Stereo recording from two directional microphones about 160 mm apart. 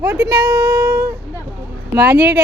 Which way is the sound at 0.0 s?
15° right (ahead or behind).